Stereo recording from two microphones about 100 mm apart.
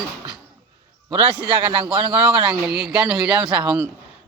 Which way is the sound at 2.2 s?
10° right (ahead or behind).